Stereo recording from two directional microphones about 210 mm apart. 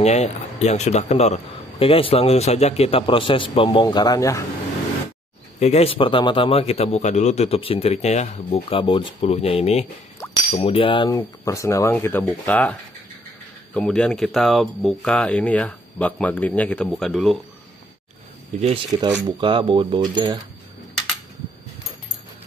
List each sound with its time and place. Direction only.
0.0 s a man's voice: 30° left (ahead or behind); by 4.5 s 15° left (ahead or behind)
5.6 s a man's voice: 30° left (ahead or behind); by 12.7 s 5° left (ahead or behind)
13.7 s speech: 5° left (ahead or behind)
18.9 s speech: 20° right (ahead or behind)